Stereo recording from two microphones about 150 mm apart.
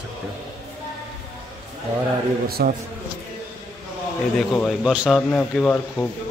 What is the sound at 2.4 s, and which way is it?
Speech, 90° right.